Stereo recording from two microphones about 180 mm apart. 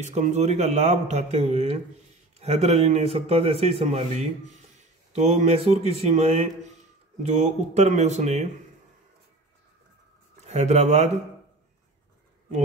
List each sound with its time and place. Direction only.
0.0 s speech: 40° right (ahead or behind)
10.4 s speech: 40° right (ahead or behind)